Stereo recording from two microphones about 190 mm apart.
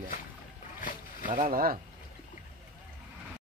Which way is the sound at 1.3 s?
40° right (ahead or behind).